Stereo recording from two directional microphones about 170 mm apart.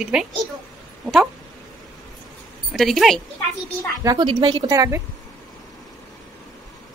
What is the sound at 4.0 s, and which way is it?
A woman's voice, 25° right (ahead or behind).